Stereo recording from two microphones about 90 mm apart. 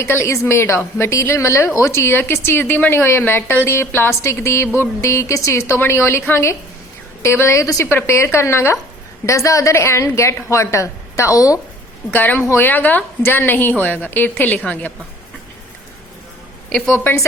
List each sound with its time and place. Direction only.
0.0 s a woman's voice: 30° left (ahead or behind)
7.9 s a woman's voice: 25° left (ahead or behind)
12.1 s a woman's voice: 20° left (ahead or behind)
16.9 s a woman's voice: 25° left (ahead or behind)